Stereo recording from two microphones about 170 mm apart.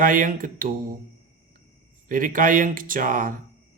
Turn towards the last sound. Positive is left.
turn(degrees=-55)  # may be behind; listen again after turning